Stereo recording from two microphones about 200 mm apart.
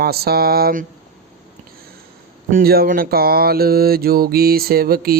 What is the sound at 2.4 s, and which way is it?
Speech, 45° right (ahead or behind).